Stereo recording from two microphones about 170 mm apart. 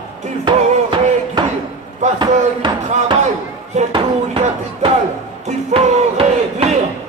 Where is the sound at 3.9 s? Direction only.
30° right (ahead or behind).